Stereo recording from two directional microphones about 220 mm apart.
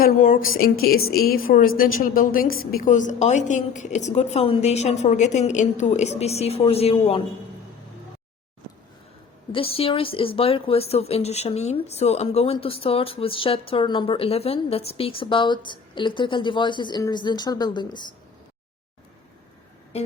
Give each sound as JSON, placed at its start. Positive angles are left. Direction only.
{"t": 0.0, "sound": "a woman's voice", "side_deg": 40}
{"t": 9.5, "sound": "a woman's voice", "side_deg": 25}